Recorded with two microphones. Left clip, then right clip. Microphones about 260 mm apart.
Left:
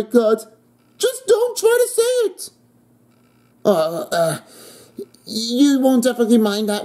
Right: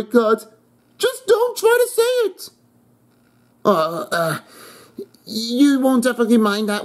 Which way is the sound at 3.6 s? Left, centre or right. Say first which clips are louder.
Even; centre.